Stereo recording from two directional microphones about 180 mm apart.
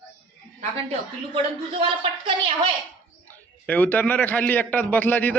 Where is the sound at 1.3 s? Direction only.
30° right (ahead or behind).